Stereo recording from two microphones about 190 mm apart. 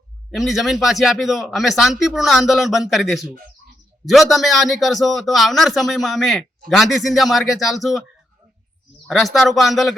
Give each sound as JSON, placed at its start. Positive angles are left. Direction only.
{"t": 0.3, "sound": "speech", "side_deg": 0}
{"t": 9.0, "sound": "speech", "side_deg": 0}